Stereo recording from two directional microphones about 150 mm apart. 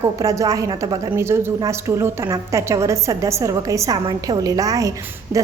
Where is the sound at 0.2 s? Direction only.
25° right (ahead or behind).